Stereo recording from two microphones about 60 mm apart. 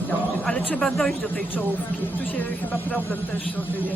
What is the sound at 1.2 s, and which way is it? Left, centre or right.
A woman's voice, left.